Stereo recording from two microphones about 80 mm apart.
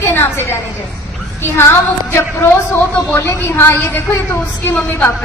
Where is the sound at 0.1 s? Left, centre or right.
Left.